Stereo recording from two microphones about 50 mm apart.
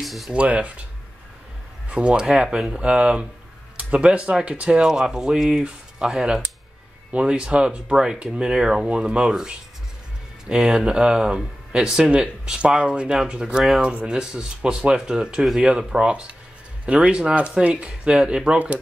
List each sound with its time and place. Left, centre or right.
0.0 s speech: centre
0.3 s speech: right
1.9 s speech: right
16.8 s speech: right